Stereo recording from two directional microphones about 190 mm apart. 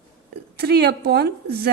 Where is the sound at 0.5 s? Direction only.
60° right (ahead or behind).